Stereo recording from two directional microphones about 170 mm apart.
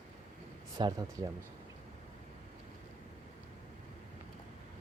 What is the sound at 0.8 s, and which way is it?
Speech, 25° right (ahead or behind).